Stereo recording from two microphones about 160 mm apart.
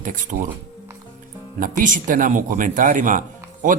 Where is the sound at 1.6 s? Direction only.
60° right (ahead or behind).